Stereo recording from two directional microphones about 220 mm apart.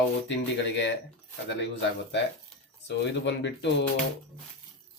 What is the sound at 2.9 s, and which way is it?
Speech, 50° left (ahead or behind).